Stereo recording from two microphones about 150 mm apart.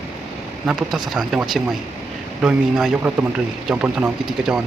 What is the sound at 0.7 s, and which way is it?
A man's voice, centre (ahead or behind).